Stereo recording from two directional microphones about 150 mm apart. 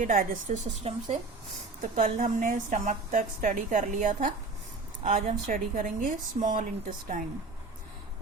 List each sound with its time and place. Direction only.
0.0 s a woman's voice: 60° right (ahead or behind)
1.8 s a woman's voice: 60° right (ahead or behind)